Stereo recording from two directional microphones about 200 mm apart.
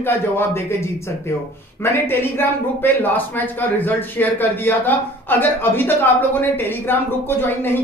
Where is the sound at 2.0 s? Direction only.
10° left (ahead or behind).